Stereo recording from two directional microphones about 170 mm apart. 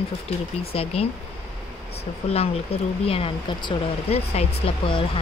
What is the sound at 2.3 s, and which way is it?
Speech, 35° left (ahead or behind).